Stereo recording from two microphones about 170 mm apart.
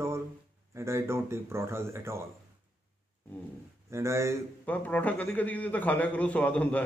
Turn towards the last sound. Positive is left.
turn(degrees=10)  # may be behind; listen again after turning